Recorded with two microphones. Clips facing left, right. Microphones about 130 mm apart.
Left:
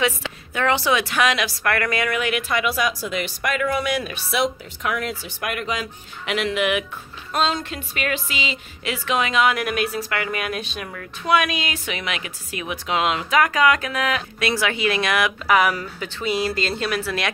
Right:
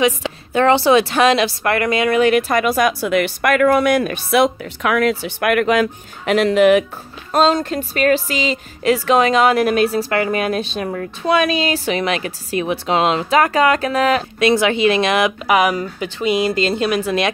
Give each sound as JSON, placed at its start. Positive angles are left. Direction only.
{"t": 0.5, "sound": "speech", "side_deg": -30}
{"t": 6.2, "sound": "speech", "side_deg": -40}